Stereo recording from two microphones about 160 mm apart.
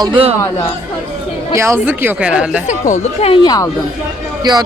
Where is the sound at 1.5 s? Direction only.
15° right (ahead or behind).